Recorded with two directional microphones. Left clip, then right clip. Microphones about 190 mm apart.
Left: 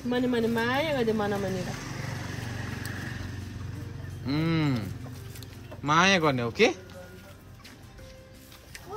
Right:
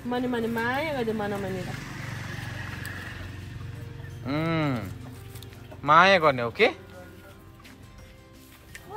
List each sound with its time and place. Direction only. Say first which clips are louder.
0.1 s speech: left 1 dB; centre (ahead or behind)
1.7 s vehicle: even; 45° left (ahead or behind)
4.3 s speech: right 1 dB; 10° left (ahead or behind)